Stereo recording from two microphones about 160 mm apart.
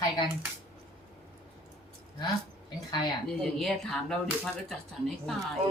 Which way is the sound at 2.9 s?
25° left (ahead or behind).